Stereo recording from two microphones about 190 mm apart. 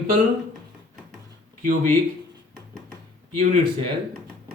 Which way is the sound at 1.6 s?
45° right (ahead or behind).